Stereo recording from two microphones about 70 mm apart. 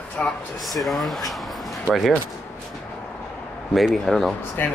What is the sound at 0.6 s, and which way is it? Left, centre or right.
Speech, centre.